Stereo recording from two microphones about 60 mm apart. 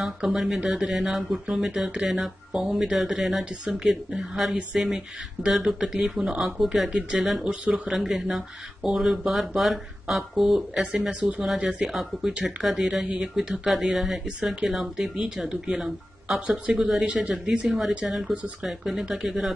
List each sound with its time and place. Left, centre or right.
0.0 s speech: centre
6.9 s speech: centre
7.9 s speech: centre; by 11.4 s right
11.8 s speech: centre
16.7 s speech: centre
17.0 s speech: right
17.6 s speech: centre